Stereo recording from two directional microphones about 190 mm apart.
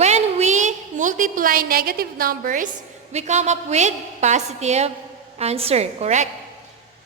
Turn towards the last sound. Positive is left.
turn(degrees=-35)  # may be behind; listen again after turning